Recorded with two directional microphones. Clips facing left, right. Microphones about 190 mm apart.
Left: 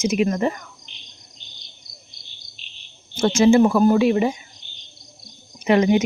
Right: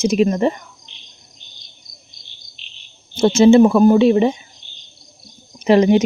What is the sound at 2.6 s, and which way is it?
Cricket, 45° left (ahead or behind).